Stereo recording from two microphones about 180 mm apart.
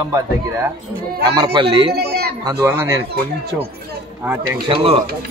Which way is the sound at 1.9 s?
65° right (ahead or behind).